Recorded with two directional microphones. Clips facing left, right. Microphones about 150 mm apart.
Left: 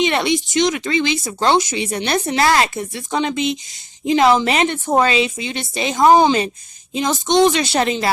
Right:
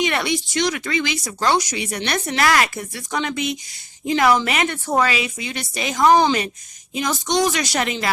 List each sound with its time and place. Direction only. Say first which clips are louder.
0.0 s a woman's voice: left 4 dB; 25° left (ahead or behind)